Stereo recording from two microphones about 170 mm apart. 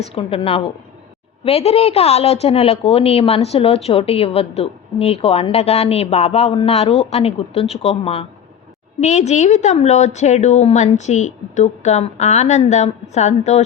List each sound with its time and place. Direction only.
0.0 s a woman's voice: 35° left (ahead or behind)